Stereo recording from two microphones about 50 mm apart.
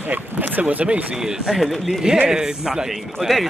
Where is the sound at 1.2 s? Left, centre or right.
Centre.